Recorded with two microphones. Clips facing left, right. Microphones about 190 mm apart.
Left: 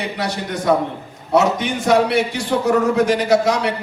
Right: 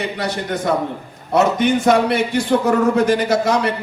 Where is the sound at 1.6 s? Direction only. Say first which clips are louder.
Right 2 dB; 60° right (ahead or behind).